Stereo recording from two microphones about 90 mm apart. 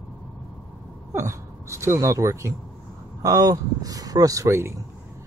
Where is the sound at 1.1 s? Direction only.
35° right (ahead or behind).